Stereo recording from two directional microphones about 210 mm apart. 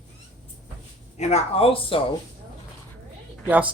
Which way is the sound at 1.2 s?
30° left (ahead or behind).